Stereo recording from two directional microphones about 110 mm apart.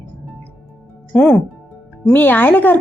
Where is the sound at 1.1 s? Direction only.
10° left (ahead or behind).